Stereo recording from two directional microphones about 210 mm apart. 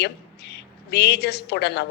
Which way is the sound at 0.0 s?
55° left (ahead or behind).